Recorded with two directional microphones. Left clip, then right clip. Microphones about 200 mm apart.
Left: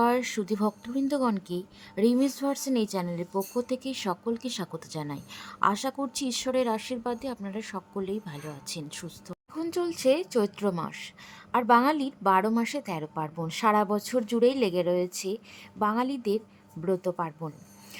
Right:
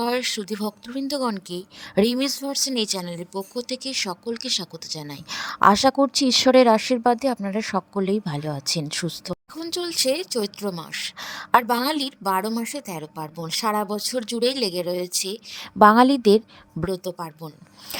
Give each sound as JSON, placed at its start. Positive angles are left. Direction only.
{"t": 0.0, "sound": "speech", "side_deg": -40}
{"t": 10.6, "sound": "a woman's voice", "side_deg": 5}
{"t": 10.9, "sound": "speech", "side_deg": -45}
{"t": 11.6, "sound": "a woman's voice", "side_deg": 5}
{"t": 11.9, "sound": "speech", "side_deg": -45}
{"t": 12.2, "sound": "a woman's voice", "side_deg": 0}
{"t": 12.7, "sound": "speech", "side_deg": -40}
{"t": 13.1, "sound": "a woman's voice", "side_deg": 0}
{"t": 13.9, "sound": "speech", "side_deg": -40}
{"t": 17.2, "sound": "a woman's voice", "side_deg": 0}